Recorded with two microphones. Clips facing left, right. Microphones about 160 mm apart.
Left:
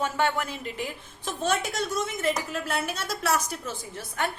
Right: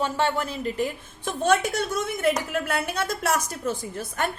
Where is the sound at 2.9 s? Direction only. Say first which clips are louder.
Right 5 dB; 55° right (ahead or behind).